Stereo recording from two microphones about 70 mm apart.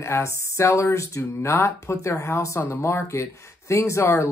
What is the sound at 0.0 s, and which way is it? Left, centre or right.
Speech, left.